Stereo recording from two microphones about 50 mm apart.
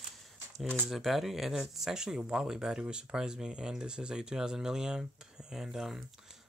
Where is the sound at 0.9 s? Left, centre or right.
Centre.